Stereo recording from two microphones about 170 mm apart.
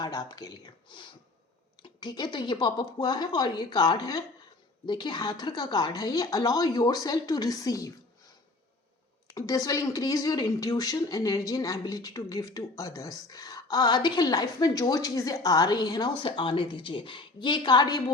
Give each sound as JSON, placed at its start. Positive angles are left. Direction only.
{"t": 0.0, "sound": "speech", "side_deg": 25}
{"t": 9.3, "sound": "speech", "side_deg": 20}